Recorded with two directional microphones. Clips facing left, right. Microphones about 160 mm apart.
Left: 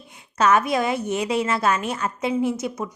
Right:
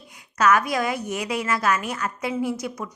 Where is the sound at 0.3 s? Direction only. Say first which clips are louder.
Left 1 dB; 25° left (ahead or behind).